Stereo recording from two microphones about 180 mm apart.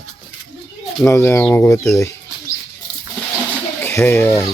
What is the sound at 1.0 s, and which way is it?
Speech, 15° left (ahead or behind).